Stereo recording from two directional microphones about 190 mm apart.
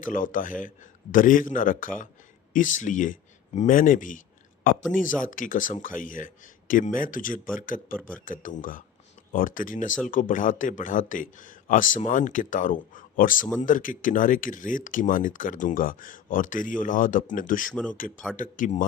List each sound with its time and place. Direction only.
0.0 s speech: 45° left (ahead or behind)